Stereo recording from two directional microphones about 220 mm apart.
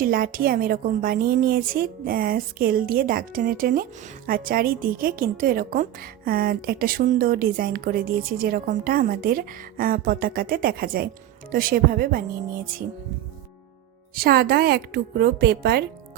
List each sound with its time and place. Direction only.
0.0 s a woman's voice: 40° right (ahead or behind)
14.2 s a woman's voice: 45° right (ahead or behind)